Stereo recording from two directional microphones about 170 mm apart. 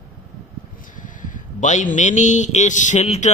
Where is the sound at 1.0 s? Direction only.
50° left (ahead or behind).